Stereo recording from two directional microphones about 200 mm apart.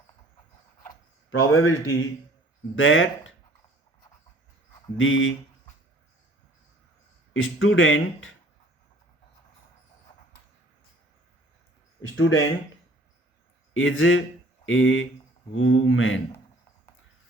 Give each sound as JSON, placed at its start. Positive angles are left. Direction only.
{"t": 1.3, "sound": "speech", "side_deg": 90}
{"t": 2.7, "sound": "speech", "side_deg": 75}
{"t": 4.9, "sound": "speech", "side_deg": 75}
{"t": 7.3, "sound": "speech", "side_deg": 80}
{"t": 12.0, "sound": "speech", "side_deg": 80}
{"t": 13.7, "sound": "speech", "side_deg": 75}